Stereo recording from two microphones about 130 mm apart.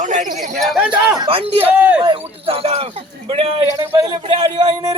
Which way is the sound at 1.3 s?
45° right (ahead or behind).